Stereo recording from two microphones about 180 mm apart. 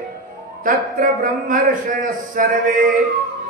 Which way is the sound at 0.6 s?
50° right (ahead or behind).